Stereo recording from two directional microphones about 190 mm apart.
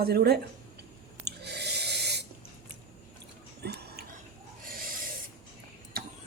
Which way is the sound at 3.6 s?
55° right (ahead or behind).